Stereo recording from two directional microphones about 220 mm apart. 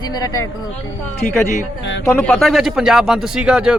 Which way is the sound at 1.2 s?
40° left (ahead or behind).